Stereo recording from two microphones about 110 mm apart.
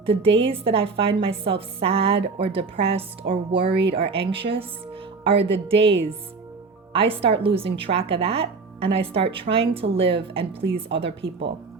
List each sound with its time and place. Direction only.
0.0 s a woman's voice: 55° right (ahead or behind)